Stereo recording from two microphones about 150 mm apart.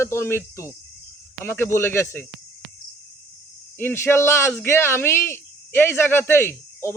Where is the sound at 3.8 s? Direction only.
15° left (ahead or behind).